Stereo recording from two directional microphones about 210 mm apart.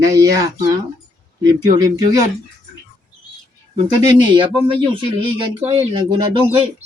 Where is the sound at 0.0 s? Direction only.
15° right (ahead or behind).